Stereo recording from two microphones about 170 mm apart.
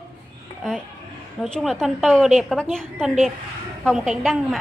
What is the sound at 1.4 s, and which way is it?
A woman's voice, 5° left (ahead or behind).